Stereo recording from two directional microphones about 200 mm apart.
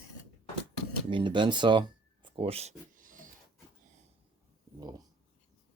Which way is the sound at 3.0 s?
40° right (ahead or behind).